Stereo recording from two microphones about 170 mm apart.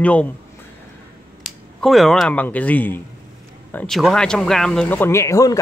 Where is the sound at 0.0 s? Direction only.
5° left (ahead or behind).